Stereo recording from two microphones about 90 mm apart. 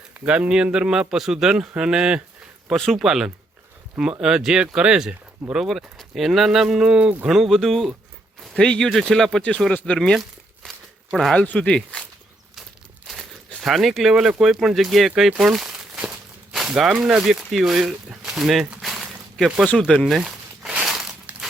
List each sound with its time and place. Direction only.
0.3 s speech: 10° right (ahead or behind)
2.7 s speech: 5° left (ahead or behind)
3.0 s a man's voice: 5° right (ahead or behind); by 12.0 s 10° left (ahead or behind)
13.6 s speech: centre (ahead or behind)
15.3 s crumpling: 5° right (ahead or behind)
16.5 s speech: 5° right (ahead or behind)
18.8 s a sound: centre (ahead or behind)
20.1 s crumpling: centre (ahead or behind)
21.3 s crumpling: 15° right (ahead or behind)